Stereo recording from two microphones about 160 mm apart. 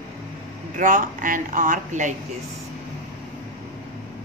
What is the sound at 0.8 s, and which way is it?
Speech, 55° right (ahead or behind).